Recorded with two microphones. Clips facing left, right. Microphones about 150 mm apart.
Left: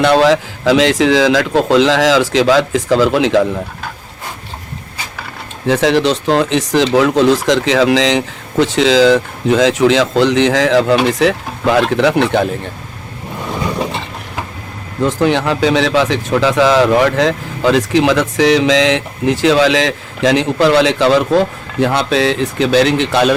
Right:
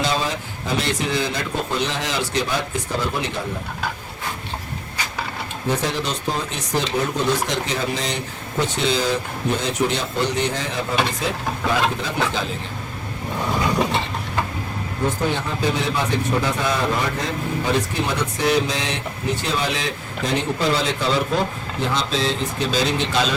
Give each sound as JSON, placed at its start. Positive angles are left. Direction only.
{"t": 0.0, "sound": "a man's voice", "side_deg": 70}
{"t": 5.6, "sound": "a man's voice", "side_deg": 90}
{"t": 15.0, "sound": "a man's voice", "side_deg": 85}